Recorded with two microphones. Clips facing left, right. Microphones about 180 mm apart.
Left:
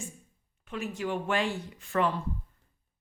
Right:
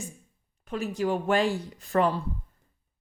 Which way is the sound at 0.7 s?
40° right (ahead or behind).